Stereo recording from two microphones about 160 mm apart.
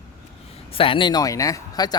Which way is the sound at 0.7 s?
35° left (ahead or behind).